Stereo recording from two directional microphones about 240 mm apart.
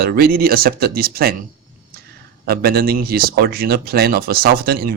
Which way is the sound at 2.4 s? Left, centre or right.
Right.